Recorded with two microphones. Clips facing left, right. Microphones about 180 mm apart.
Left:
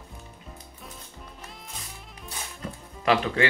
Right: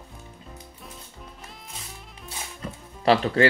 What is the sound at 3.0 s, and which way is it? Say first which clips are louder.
Speech: right 4 dB; 35° right (ahead or behind).